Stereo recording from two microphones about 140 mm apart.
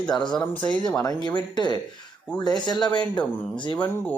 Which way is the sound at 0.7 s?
10° left (ahead or behind).